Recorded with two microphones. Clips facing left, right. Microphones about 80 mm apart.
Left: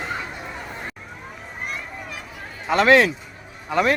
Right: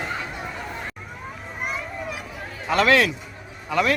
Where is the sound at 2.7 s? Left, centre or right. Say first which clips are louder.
Left 3 dB; left.